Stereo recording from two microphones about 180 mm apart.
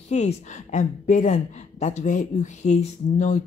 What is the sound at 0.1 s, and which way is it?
A woman's voice, 40° left (ahead or behind).